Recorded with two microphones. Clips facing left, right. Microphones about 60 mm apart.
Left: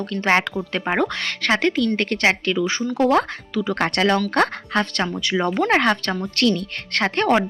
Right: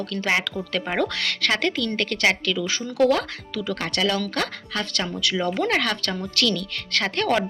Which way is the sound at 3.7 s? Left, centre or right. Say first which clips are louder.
Left 5 dB; left.